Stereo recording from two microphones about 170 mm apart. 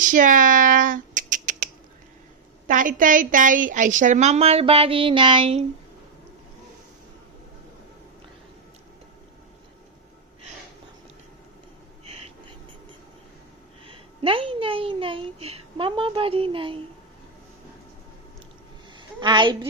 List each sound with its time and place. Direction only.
0.0 s finger snapping: 50° right (ahead or behind)
2.6 s a woman's voice: 50° right (ahead or behind); by 5.6 s 30° right (ahead or behind)
13.8 s a child's voice: 30° right (ahead or behind)
18.9 s a sound: 25° right (ahead or behind)